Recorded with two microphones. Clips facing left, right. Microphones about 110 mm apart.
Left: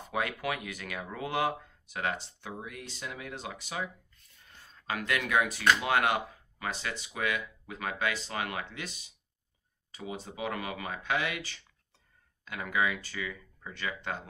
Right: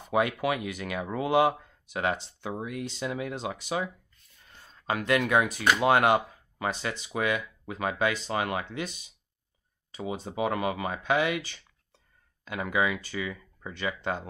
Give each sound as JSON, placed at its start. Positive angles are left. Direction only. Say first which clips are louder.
{"t": 0.1, "sound": "speech", "louder": "right 7 dB", "side_deg": -20}
{"t": 4.8, "sound": "speech", "louder": "right 6 dB", "side_deg": -25}
{"t": 5.4, "sound": "speech", "louder": "right 1 dB", "side_deg": -15}
{"t": 5.8, "sound": "speech", "louder": "right 6 dB", "side_deg": -35}
{"t": 10.3, "sound": "speech", "louder": "right 8 dB", "side_deg": -25}